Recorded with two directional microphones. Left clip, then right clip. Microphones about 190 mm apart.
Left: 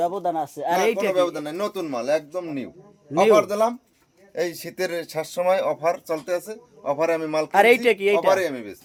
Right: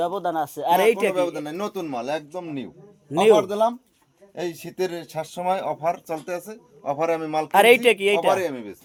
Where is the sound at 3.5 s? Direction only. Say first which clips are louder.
Even; 30° left (ahead or behind).